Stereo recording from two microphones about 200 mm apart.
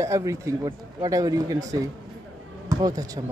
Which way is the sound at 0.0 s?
15° right (ahead or behind).